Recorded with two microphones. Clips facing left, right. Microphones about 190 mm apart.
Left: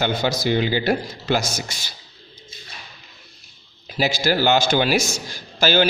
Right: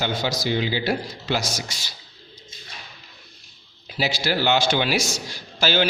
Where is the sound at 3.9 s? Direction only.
45° left (ahead or behind).